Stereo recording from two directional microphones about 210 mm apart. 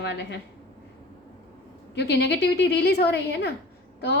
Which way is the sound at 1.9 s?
50° left (ahead or behind).